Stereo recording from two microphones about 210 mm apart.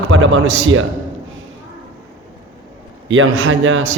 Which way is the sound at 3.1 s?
70° right (ahead or behind).